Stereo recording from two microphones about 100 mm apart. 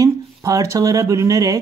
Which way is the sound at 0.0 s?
35° right (ahead or behind).